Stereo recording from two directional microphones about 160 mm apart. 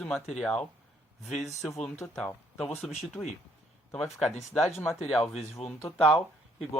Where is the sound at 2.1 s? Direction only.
5° left (ahead or behind).